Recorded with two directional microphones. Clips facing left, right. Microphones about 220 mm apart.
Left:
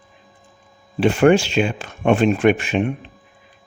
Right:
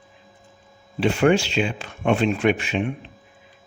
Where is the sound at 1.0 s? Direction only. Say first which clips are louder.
Left 4 dB; 50° left (ahead or behind).